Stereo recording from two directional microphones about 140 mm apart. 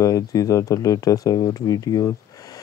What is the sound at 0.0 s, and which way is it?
Speech, 25° left (ahead or behind).